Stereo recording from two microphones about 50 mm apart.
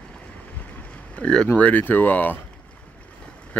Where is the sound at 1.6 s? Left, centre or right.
Left.